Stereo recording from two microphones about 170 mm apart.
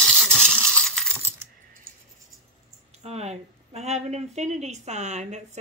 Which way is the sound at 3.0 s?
40° right (ahead or behind).